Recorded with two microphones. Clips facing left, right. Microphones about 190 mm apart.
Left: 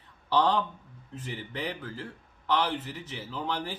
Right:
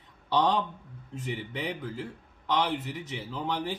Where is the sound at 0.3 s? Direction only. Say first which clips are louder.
Even; 15° right (ahead or behind).